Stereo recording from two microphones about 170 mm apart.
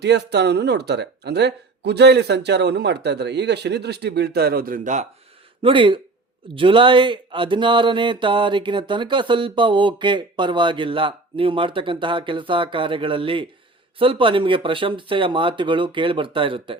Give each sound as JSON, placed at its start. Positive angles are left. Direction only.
{"t": 0.0, "sound": "speech", "side_deg": -80}
{"t": 5.6, "sound": "speech", "side_deg": -30}